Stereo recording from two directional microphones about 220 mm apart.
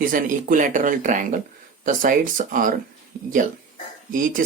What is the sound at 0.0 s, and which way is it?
Speech, 40° right (ahead or behind).